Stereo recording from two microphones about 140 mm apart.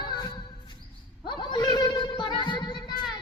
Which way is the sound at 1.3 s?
35° left (ahead or behind).